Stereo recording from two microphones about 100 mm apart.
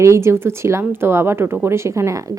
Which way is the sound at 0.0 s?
30° right (ahead or behind).